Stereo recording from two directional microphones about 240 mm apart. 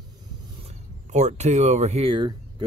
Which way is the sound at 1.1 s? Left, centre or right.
Right.